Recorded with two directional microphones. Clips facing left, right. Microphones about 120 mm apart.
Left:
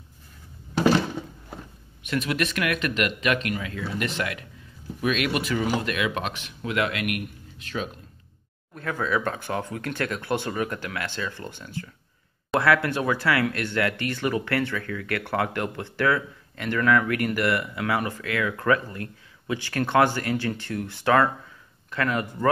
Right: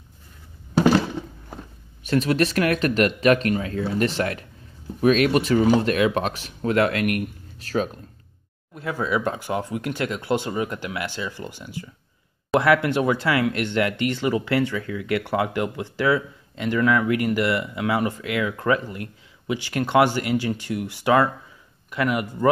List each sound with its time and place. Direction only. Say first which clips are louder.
2.0 s speech: right 6 dB; 35° right (ahead or behind)
8.7 s speech: right 2 dB; 15° right (ahead or behind)